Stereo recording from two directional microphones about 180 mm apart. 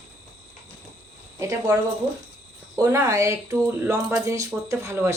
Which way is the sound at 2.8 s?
15° right (ahead or behind).